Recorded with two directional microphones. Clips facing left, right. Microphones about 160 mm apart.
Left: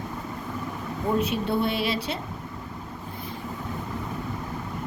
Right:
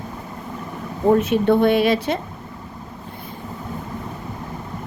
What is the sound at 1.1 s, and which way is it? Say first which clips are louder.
Speech: right 9 dB; 55° right (ahead or behind).